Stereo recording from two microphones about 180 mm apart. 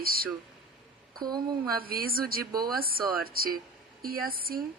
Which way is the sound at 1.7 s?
55° right (ahead or behind).